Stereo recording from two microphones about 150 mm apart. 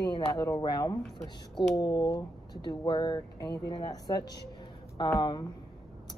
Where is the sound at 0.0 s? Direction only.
30° left (ahead or behind).